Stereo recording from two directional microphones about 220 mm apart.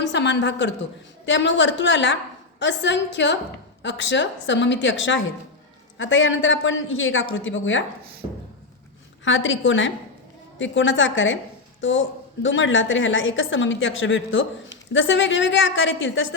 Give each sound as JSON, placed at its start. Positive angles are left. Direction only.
{"t": 0.0, "sound": "a woman's voice", "side_deg": 55}
{"t": 9.2, "sound": "a woman's voice", "side_deg": 60}